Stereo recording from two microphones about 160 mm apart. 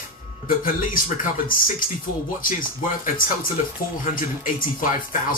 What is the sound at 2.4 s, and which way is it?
Speech, 60° left (ahead or behind).